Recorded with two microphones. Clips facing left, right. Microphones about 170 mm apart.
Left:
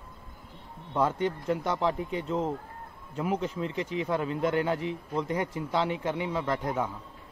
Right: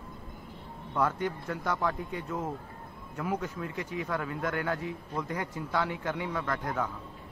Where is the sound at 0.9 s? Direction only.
25° left (ahead or behind).